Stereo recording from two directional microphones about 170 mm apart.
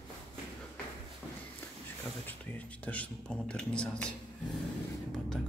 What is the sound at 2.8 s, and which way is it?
Speech, 10° left (ahead or behind).